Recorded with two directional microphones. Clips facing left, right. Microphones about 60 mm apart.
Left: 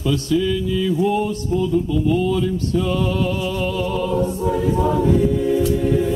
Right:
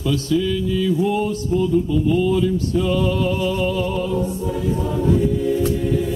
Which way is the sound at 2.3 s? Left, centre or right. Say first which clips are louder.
Right 1 dB; centre.